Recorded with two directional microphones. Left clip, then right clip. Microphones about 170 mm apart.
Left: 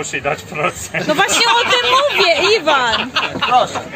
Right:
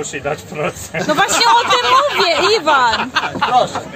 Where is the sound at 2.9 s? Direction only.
45° right (ahead or behind).